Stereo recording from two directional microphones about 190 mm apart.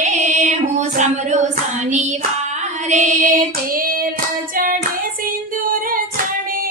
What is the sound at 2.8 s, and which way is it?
Female singing, 40° right (ahead or behind).